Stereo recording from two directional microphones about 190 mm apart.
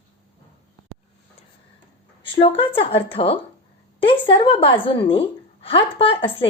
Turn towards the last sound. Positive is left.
turn(degrees=30)  # may be behind; listen again after turning